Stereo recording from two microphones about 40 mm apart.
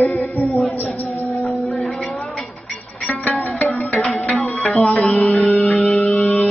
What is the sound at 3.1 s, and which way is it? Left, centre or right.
Music, left.